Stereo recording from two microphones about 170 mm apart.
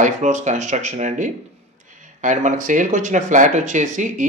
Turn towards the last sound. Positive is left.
turn(degrees=-50)  # may be behind; listen again after turning